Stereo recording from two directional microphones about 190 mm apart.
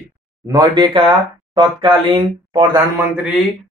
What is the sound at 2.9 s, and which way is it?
Speech, 10° right (ahead or behind).